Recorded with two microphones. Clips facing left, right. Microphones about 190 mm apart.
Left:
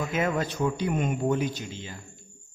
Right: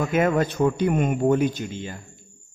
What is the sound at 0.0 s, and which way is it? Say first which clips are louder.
A man's voice: right 6 dB; 55° right (ahead or behind).